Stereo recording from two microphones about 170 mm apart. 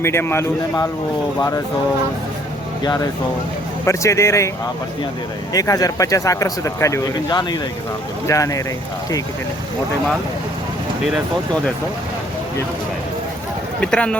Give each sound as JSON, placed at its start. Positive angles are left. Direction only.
{"t": 0.0, "sound": "speech", "side_deg": 15}
{"t": 2.8, "sound": "speech", "side_deg": 25}
{"t": 5.5, "sound": "speech", "side_deg": 20}
{"t": 13.8, "sound": "speech", "side_deg": 5}